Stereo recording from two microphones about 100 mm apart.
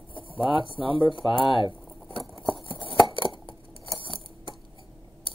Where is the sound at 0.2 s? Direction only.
65° left (ahead or behind).